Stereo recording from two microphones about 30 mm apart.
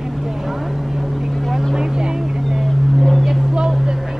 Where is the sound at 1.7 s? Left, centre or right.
Right.